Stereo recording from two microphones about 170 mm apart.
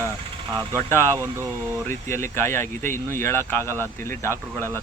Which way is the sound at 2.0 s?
15° left (ahead or behind).